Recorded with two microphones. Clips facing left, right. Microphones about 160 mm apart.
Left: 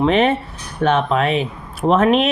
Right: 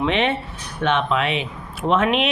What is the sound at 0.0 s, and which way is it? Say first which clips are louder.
Speech: left 5 dB; 40° left (ahead or behind).